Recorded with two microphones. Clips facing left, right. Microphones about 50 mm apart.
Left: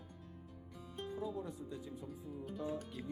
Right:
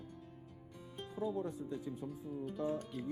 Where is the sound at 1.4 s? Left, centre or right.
Right.